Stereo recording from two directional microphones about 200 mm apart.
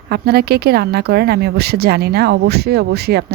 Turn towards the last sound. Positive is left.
turn(degrees=-55)  # may be behind; listen again after turning